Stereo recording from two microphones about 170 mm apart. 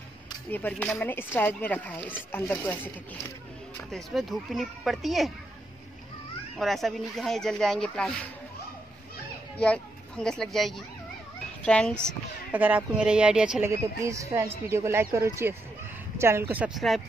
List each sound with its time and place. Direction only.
0.5 s speech: 10° left (ahead or behind)
3.9 s speech: centre (ahead or behind)
6.6 s speech: centre (ahead or behind)
9.6 s speech: 5° left (ahead or behind)
12.5 s speech: 10° right (ahead or behind)
13.7 s speech: 15° right (ahead or behind); by 17.0 s centre (ahead or behind)